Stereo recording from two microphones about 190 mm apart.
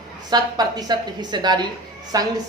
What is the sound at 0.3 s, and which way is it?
A woman's voice, 20° right (ahead or behind).